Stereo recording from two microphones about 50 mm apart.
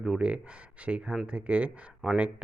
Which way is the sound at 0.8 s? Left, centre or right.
Right.